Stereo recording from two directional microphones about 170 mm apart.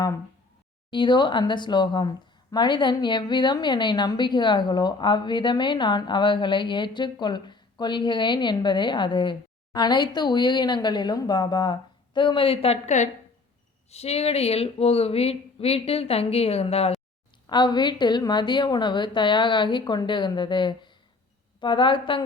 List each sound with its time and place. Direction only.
0.9 s speech: 25° left (ahead or behind)
17.4 s speech: 25° left (ahead or behind)